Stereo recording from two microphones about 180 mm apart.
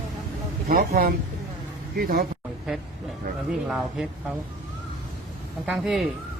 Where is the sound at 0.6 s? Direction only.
55° right (ahead or behind).